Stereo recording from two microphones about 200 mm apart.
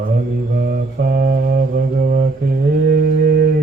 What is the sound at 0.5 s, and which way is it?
Mantra, 50° right (ahead or behind).